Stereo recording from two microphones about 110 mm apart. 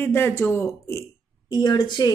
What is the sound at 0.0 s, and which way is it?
Speech, 20° left (ahead or behind).